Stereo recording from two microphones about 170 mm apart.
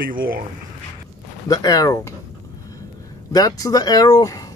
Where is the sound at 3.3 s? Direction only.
20° left (ahead or behind).